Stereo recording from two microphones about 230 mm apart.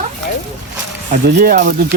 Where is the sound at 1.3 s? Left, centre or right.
Right.